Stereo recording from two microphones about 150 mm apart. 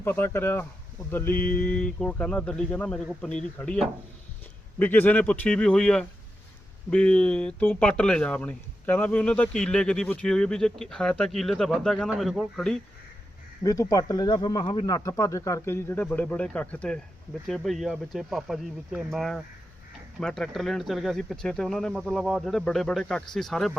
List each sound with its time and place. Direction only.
0.0 s speech: 15° left (ahead or behind)
13.7 s speech: 25° left (ahead or behind); by 23.7 s centre (ahead or behind)